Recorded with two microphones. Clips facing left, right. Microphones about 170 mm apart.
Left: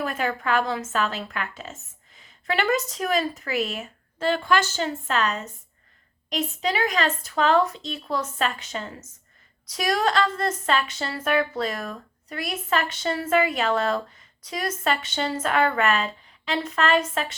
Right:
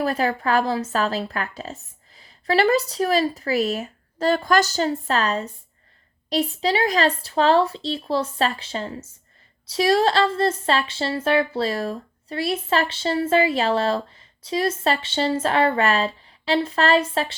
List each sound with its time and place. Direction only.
0.0 s speech: 35° right (ahead or behind)